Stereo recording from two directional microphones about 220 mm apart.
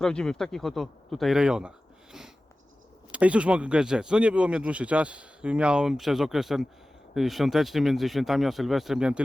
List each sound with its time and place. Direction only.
0.0 s speech: 5° left (ahead or behind)
3.1 s speech: 5° right (ahead or behind)